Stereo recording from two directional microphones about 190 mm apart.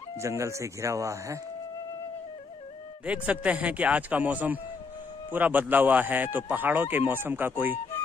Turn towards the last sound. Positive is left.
turn(degrees=-10)  # may be behind; listen again after turning